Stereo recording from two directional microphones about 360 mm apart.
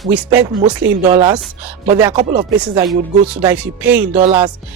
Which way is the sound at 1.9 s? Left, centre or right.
Centre.